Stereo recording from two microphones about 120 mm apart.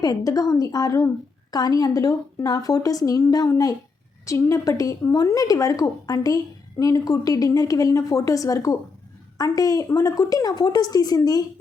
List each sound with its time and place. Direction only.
0.0 s a woman's voice: 30° left (ahead or behind)